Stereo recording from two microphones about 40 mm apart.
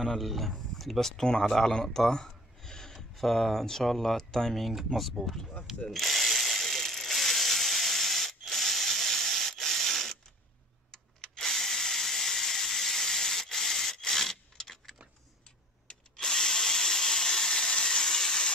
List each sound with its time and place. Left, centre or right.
0.0 s speech: centre
4.6 s speech: centre
5.9 s ratchet: centre
10.9 s drill: centre